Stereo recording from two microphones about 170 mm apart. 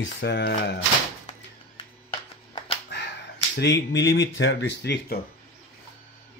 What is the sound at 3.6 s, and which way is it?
Speech, 90° left.